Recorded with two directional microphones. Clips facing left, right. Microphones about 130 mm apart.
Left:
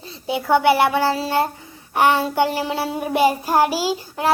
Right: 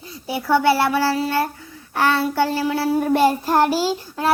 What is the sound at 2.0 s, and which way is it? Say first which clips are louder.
Child singing: left 2 dB; 15° left (ahead or behind).